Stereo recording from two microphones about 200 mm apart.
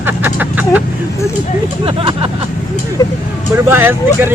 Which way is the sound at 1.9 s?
25° right (ahead or behind).